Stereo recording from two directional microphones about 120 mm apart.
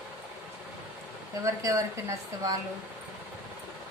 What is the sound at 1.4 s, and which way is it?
Speech, 25° right (ahead or behind).